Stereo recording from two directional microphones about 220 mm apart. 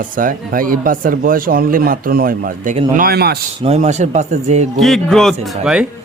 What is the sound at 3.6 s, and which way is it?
Speech, 30° right (ahead or behind).